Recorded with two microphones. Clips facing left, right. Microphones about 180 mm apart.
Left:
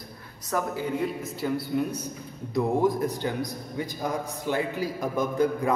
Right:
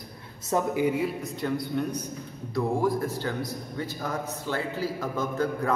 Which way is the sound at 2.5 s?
20° left (ahead or behind).